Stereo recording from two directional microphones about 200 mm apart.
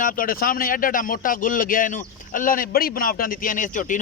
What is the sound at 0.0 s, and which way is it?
A man's voice, 45° left (ahead or behind).